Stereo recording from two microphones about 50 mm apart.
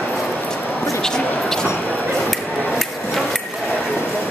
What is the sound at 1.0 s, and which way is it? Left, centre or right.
Speech, centre.